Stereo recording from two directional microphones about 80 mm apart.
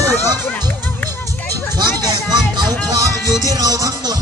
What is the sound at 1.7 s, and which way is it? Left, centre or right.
Music, right.